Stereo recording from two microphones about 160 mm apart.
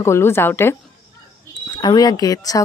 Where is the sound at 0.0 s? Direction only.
15° left (ahead or behind).